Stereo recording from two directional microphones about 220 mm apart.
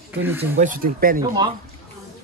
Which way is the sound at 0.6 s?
40° right (ahead or behind).